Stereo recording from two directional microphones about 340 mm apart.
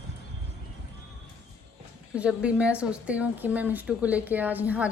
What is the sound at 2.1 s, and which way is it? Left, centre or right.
A woman's voice, centre.